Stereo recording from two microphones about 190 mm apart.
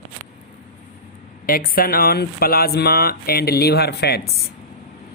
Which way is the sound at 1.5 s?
50° left (ahead or behind).